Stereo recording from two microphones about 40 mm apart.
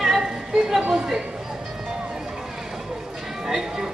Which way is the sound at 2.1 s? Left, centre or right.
Centre.